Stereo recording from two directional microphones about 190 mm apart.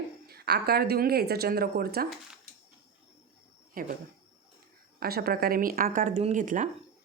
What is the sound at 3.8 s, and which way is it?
Speech, 50° right (ahead or behind).